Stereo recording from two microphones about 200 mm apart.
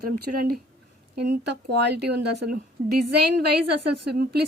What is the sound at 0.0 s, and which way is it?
Speech, 50° right (ahead or behind).